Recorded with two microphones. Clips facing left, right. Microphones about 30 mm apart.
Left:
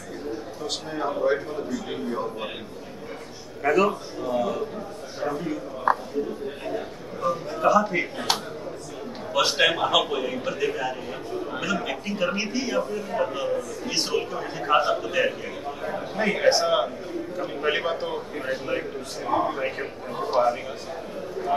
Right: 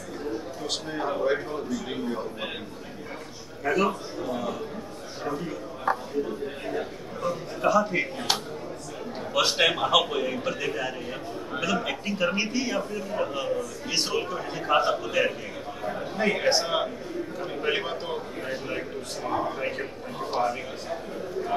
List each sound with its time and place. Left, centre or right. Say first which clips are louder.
0.7 s a man's voice: left 1 dB; centre
3.7 s a man's voice: left 3 dB; centre
4.3 s a man's voice: left 7 dB; centre
7.2 s a man's voice: left 4 dB; centre
18.4 s a man's voice: left 4 dB; centre
19.6 s a man's voice: left 2 dB; centre